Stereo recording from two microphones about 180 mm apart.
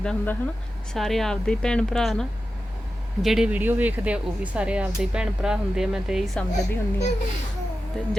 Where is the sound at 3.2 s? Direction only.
5° right (ahead or behind).